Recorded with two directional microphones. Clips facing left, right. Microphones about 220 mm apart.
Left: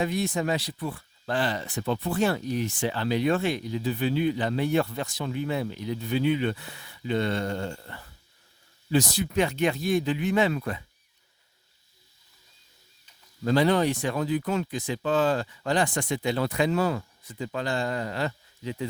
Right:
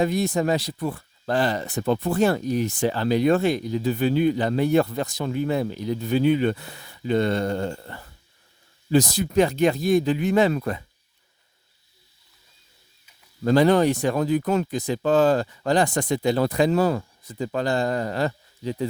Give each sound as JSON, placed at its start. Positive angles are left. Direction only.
{"t": 0.0, "sound": "speech", "side_deg": -40}
{"t": 13.4, "sound": "speech", "side_deg": -45}